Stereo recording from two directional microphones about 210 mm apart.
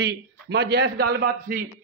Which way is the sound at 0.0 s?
55° right (ahead or behind).